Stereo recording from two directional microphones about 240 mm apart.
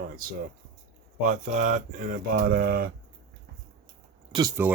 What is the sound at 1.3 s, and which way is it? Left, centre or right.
Speech, right.